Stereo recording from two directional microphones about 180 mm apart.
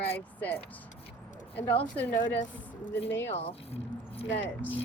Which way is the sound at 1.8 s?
10° left (ahead or behind).